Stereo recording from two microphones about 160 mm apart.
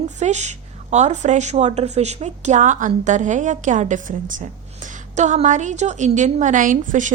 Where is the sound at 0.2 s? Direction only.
45° right (ahead or behind).